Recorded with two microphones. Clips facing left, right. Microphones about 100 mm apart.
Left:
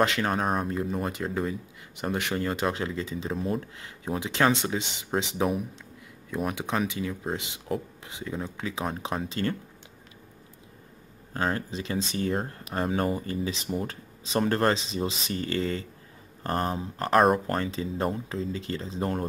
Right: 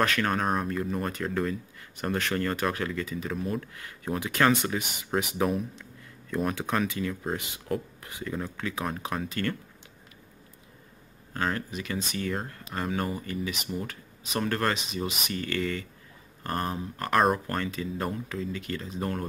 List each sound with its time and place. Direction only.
0.0 s speech: 20° left (ahead or behind)
6.3 s speech: 15° left (ahead or behind)
11.3 s speech: 25° left (ahead or behind)